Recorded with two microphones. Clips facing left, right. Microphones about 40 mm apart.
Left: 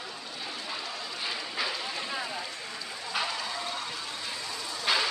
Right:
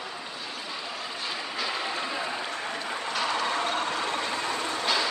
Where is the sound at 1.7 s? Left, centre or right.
Right.